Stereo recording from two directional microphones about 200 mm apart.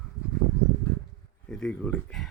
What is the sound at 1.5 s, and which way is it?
Speech, 5° left (ahead or behind).